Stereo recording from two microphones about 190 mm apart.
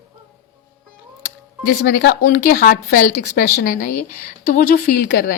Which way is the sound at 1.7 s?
50° left (ahead or behind).